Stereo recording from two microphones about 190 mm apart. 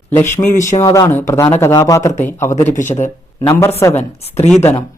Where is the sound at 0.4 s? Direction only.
40° left (ahead or behind).